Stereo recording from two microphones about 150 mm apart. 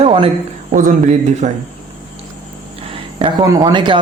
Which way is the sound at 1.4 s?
50° right (ahead or behind).